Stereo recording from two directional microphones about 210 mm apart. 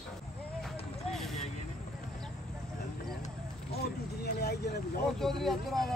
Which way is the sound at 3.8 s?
50° left (ahead or behind).